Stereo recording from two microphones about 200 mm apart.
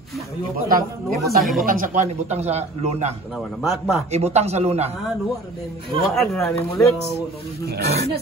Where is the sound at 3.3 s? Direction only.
Centre (ahead or behind).